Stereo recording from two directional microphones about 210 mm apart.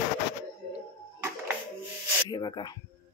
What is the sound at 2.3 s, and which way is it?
Speech, 20° left (ahead or behind).